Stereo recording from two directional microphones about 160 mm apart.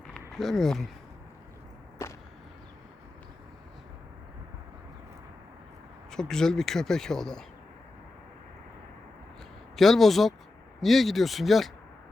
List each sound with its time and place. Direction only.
0.3 s speech: centre (ahead or behind)
2.0 s a sound: 20° left (ahead or behind)
6.1 s speech: 5° left (ahead or behind)
9.7 s speech: centre (ahead or behind)